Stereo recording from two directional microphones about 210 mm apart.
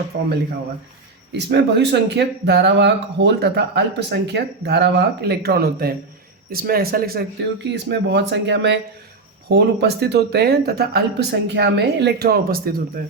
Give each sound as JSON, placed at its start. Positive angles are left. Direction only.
{"t": 1.3, "sound": "speech", "side_deg": -55}